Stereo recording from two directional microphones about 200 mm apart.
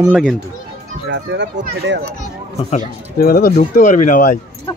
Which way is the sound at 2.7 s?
45° left (ahead or behind).